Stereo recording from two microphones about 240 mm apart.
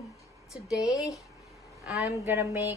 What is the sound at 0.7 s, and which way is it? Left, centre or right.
Speech, centre.